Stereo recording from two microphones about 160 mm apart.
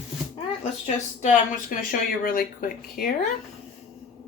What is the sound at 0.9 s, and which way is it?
Speech, 50° left (ahead or behind).